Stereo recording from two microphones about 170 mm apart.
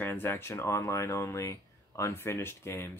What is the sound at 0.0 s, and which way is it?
Speech, 10° left (ahead or behind).